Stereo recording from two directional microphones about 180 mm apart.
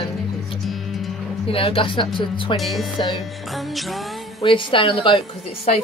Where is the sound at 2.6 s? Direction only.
Centre (ahead or behind).